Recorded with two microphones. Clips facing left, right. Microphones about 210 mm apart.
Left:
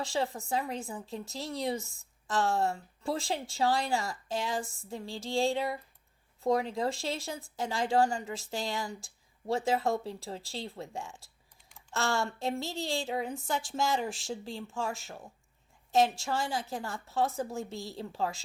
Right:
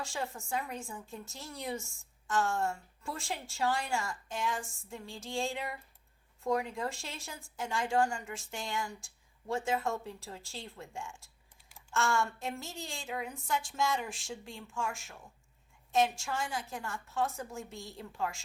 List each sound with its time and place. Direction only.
0.0 s speech: 35° left (ahead or behind)